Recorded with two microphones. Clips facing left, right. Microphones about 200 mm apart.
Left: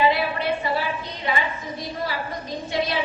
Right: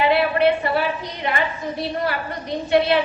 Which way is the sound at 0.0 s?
65° right (ahead or behind).